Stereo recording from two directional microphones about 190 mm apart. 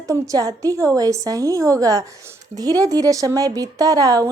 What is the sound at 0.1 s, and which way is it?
A woman's voice, 20° right (ahead or behind).